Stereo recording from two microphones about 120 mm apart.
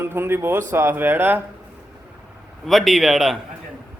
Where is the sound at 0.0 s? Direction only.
20° right (ahead or behind).